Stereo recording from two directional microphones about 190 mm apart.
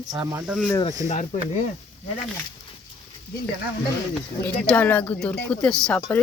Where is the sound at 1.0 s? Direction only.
40° left (ahead or behind).